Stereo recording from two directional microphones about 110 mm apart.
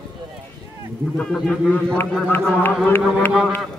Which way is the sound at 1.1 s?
5° left (ahead or behind).